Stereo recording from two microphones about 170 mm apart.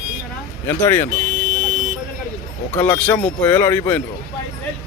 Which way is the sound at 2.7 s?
10° left (ahead or behind).